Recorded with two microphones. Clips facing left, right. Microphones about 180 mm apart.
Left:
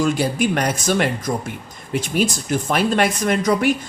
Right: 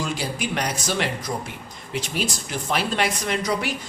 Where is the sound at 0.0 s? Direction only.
50° left (ahead or behind).